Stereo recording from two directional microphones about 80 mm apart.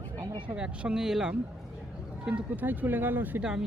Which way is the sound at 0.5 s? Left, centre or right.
Centre.